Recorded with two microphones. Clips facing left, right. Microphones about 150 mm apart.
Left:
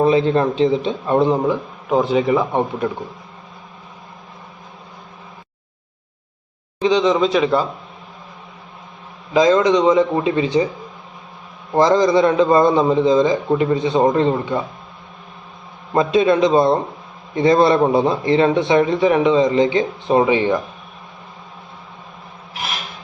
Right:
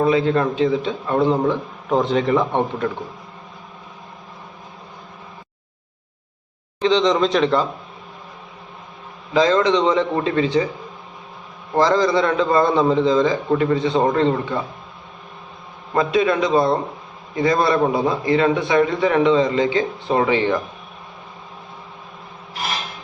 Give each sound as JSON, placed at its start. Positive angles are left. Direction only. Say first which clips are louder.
{"t": 0.0, "sound": "a man's voice", "louder": "left 2 dB", "side_deg": 20}
{"t": 6.7, "sound": "a man's voice", "louder": "left 1 dB", "side_deg": 10}
{"t": 9.3, "sound": "a man's voice", "louder": "left 3 dB", "side_deg": 15}
{"t": 11.7, "sound": "a man's voice", "louder": "left 3 dB", "side_deg": 20}
{"t": 15.9, "sound": "a man's voice", "louder": "left 3 dB", "side_deg": 20}